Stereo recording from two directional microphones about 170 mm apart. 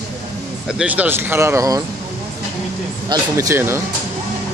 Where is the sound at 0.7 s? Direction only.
5° right (ahead or behind).